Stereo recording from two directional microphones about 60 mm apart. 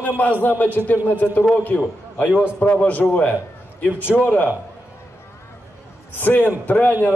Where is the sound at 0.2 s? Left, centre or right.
Left.